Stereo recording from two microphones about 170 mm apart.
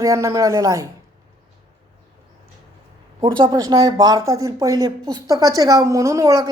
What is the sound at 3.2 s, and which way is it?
Speech, 30° right (ahead or behind).